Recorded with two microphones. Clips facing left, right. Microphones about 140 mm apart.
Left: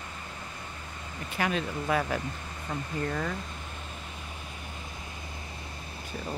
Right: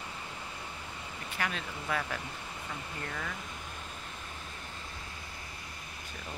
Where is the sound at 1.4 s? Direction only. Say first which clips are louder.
Left 7 dB; 25° left (ahead or behind).